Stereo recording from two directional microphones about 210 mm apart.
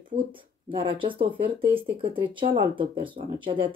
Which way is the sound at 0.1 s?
25° right (ahead or behind).